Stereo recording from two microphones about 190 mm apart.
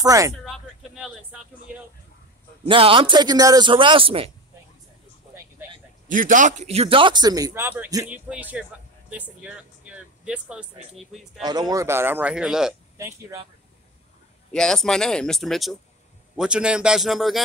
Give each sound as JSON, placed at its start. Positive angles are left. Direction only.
{"t": 0.0, "sound": "a man's voice", "side_deg": -20}
{"t": 0.5, "sound": "music", "side_deg": -5}
{"t": 2.6, "sound": "a man's voice", "side_deg": -30}
{"t": 6.0, "sound": "a man's voice", "side_deg": -45}
{"t": 11.4, "sound": "speech", "side_deg": -20}
{"t": 12.9, "sound": "speech", "side_deg": -15}
{"t": 14.5, "sound": "speech", "side_deg": 5}